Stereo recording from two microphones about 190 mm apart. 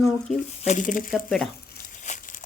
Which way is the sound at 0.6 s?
40° left (ahead or behind).